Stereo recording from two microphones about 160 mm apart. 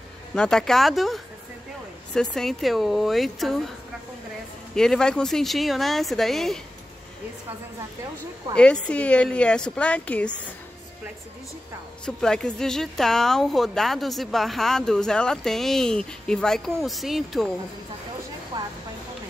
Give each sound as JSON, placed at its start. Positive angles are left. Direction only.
{"t": 0.3, "sound": "speech", "side_deg": 5}
{"t": 4.7, "sound": "speech", "side_deg": 5}
{"t": 8.5, "sound": "speech", "side_deg": 5}
{"t": 12.2, "sound": "speech", "side_deg": 5}
{"t": 18.5, "sound": "a sound", "side_deg": -30}